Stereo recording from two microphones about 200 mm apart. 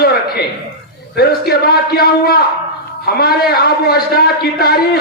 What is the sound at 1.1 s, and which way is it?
A man's voice, 50° left (ahead or behind).